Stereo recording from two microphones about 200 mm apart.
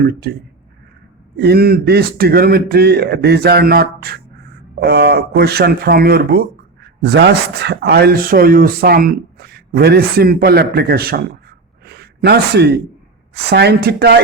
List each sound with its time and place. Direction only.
0.0 s speech: 50° right (ahead or behind)
1.4 s speech: 50° right (ahead or behind)
11.9 s a sound: 55° right (ahead or behind)
13.3 s a woman's voice: 55° right (ahead or behind)